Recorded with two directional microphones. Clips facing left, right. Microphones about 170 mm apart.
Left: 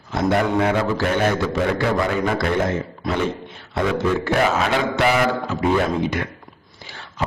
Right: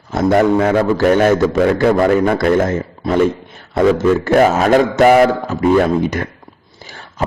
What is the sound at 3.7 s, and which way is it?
A man's voice, 45° right (ahead or behind).